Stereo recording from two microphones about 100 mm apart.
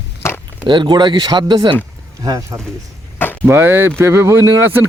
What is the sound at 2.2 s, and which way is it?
Speech, 35° right (ahead or behind).